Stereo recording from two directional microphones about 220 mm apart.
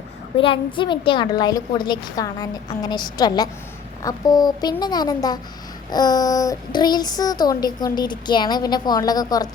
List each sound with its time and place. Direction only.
0.3 s a woman's voice: 25° left (ahead or behind)